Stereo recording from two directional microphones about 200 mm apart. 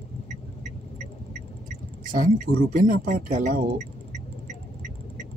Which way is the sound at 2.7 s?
45° right (ahead or behind).